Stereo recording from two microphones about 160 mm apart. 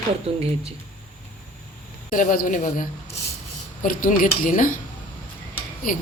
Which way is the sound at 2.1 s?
55° left (ahead or behind).